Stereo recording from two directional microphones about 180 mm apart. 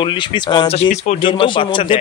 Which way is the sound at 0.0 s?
25° left (ahead or behind).